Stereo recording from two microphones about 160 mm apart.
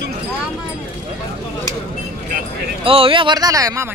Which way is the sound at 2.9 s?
35° right (ahead or behind).